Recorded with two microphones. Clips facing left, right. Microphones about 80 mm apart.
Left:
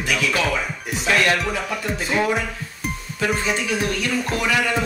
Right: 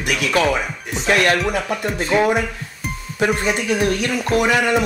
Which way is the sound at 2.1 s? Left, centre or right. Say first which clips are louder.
Right 5 dB; centre.